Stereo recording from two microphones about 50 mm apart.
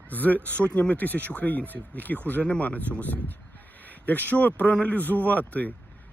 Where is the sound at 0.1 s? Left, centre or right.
Left.